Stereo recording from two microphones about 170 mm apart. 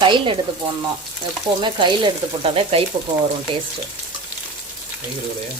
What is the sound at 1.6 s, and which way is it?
Speech, 25° right (ahead or behind).